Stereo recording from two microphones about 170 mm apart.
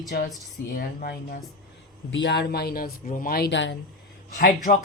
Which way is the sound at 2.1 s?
90° left.